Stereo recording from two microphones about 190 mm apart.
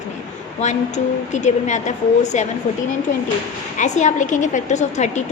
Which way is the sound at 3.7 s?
40° left (ahead or behind).